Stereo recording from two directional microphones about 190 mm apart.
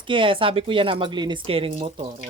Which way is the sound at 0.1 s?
25° right (ahead or behind).